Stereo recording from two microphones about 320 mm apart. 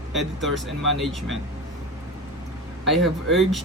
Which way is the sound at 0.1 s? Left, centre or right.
Centre.